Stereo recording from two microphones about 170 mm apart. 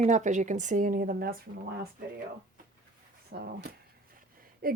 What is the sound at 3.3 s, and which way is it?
Speech, 65° right (ahead or behind).